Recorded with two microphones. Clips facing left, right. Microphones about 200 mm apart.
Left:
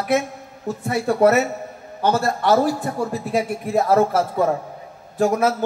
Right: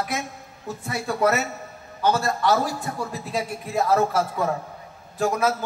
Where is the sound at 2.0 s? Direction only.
55° left (ahead or behind).